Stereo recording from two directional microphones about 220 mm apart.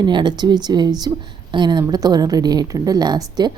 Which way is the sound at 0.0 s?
20° right (ahead or behind).